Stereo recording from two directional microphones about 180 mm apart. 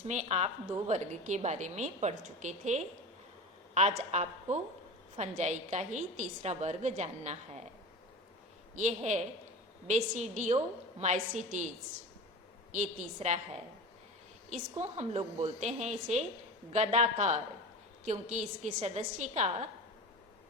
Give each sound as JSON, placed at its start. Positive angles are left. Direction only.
{"t": 0.1, "sound": "a woman's voice", "side_deg": -40}
{"t": 8.7, "sound": "a woman's voice", "side_deg": -40}
{"t": 12.7, "sound": "a woman's voice", "side_deg": -40}
{"t": 14.5, "sound": "a woman's voice", "side_deg": -40}